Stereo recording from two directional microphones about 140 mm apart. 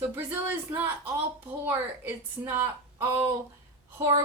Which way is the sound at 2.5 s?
20° right (ahead or behind).